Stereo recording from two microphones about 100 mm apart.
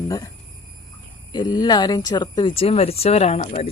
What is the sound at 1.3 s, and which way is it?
Speech, 45° left (ahead or behind).